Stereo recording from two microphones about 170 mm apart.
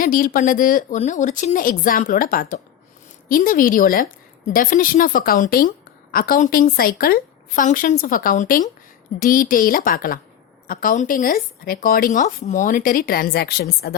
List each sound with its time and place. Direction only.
0.0 s a woman's voice: 55° left (ahead or behind)